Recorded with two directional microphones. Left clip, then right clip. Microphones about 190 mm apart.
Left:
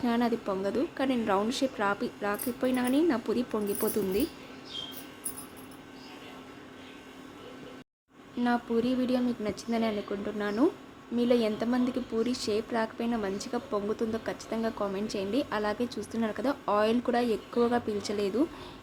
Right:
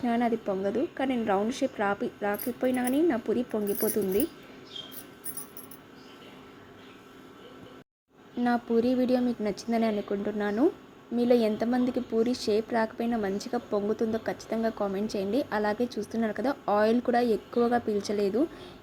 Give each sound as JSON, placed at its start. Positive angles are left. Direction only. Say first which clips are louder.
{"t": 0.0, "sound": "a woman's voice", "louder": "right 1 dB", "side_deg": -10}
{"t": 8.4, "sound": "a woman's voice", "louder": "right 3 dB", "side_deg": -20}